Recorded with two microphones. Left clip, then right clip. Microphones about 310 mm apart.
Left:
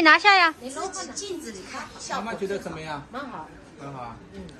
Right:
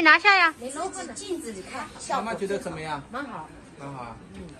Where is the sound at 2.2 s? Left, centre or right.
Centre.